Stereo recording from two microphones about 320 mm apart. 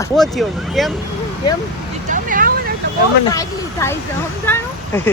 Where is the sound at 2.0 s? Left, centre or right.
Right.